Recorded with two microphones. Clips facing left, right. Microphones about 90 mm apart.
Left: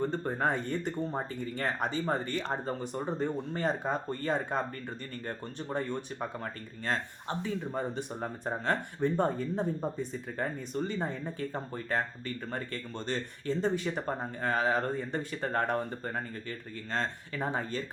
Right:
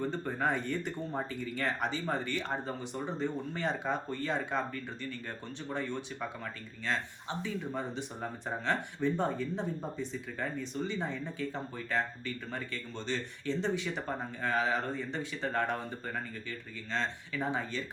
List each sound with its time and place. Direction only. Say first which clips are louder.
0.1 s speech: left 2 dB; 40° left (ahead or behind)